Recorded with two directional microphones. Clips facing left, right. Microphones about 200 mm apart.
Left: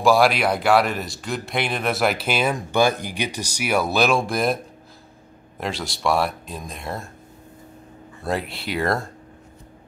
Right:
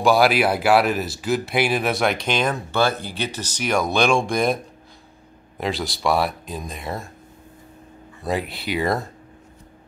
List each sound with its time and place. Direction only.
0.0 s speech: centre (ahead or behind)
5.6 s speech: centre (ahead or behind)
8.2 s speech: centre (ahead or behind)